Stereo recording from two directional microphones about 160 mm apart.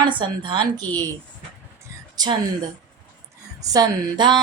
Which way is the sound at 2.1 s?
25° right (ahead or behind).